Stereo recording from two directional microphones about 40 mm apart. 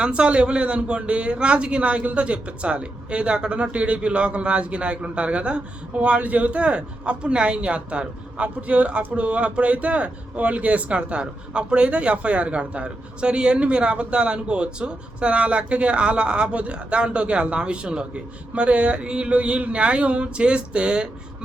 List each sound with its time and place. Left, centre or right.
0.0 s speech: right